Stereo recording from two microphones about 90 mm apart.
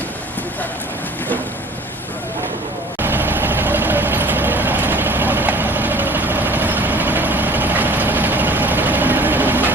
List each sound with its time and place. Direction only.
3.0 s vehicle: 20° right (ahead or behind)